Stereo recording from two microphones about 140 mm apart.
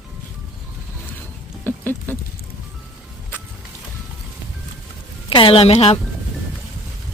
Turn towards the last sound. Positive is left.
turn(degrees=45)  # may be behind; listen again after turning